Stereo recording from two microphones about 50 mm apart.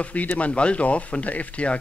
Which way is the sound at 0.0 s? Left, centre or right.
Left.